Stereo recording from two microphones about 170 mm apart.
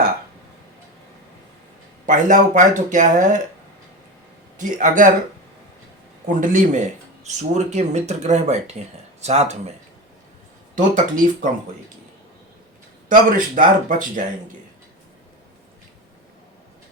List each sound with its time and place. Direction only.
2.0 s speech: 50° right (ahead or behind)
4.5 s speech: 50° right (ahead or behind)
6.2 s speech: 50° right (ahead or behind)
10.8 s speech: 50° right (ahead or behind)
13.1 s speech: 50° right (ahead or behind)